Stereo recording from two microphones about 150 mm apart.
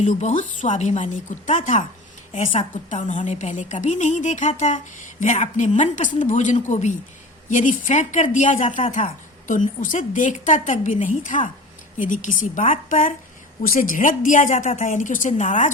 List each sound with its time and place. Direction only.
0.0 s a woman's voice: 50° left (ahead or behind)